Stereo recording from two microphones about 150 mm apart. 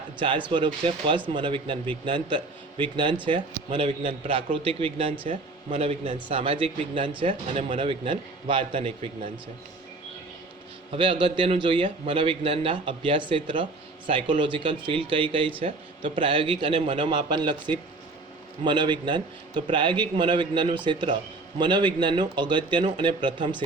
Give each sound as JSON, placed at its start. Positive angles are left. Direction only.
{"t": 0.2, "sound": "a man's voice", "side_deg": -35}
{"t": 10.9, "sound": "a man's voice", "side_deg": -35}